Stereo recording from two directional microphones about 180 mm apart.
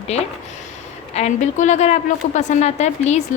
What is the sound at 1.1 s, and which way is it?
A woman's voice, 40° left (ahead or behind).